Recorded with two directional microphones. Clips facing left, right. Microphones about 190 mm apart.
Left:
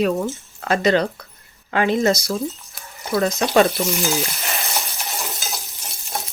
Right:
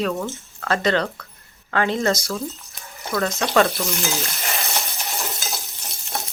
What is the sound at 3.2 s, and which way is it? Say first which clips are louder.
Cutlery: left 3 dB; 20° left (ahead or behind).